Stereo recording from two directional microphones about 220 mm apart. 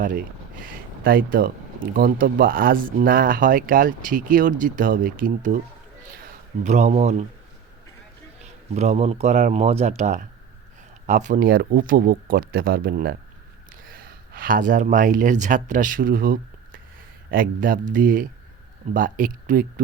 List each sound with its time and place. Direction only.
0.6 s speech: 40° right (ahead or behind)
6.6 s speech: 35° right (ahead or behind)
8.7 s speech: 30° right (ahead or behind)